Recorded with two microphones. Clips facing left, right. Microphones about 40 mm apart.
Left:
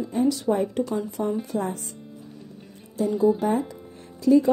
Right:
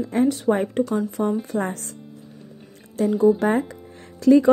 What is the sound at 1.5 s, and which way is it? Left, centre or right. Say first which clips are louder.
Speech: right 2 dB; right.